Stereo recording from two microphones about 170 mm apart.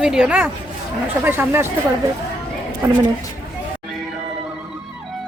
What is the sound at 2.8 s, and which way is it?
Speech, 15° right (ahead or behind).